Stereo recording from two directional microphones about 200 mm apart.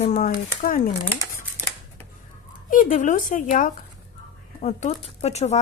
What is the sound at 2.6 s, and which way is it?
A woman's voice, 40° left (ahead or behind).